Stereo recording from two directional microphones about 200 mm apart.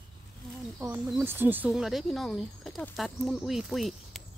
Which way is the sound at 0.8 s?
5° right (ahead or behind).